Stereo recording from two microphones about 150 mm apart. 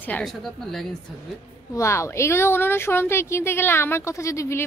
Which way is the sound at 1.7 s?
20° left (ahead or behind).